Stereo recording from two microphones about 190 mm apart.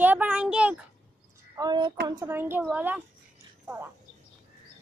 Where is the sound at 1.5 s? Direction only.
20° right (ahead or behind).